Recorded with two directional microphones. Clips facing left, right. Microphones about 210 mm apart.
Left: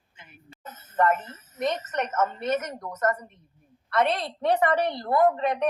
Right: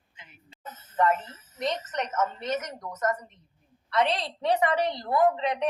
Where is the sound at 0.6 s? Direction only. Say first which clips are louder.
Left 1 dB; 55° left (ahead or behind).